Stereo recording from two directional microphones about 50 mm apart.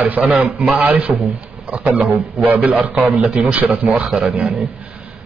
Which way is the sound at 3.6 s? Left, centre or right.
Centre.